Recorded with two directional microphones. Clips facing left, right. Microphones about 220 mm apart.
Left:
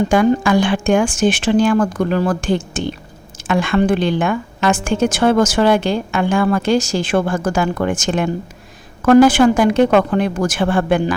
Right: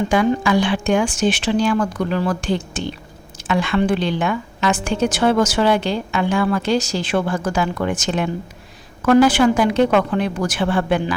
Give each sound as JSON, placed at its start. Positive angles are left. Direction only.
{"t": 0.1, "sound": "a woman's voice", "side_deg": 50}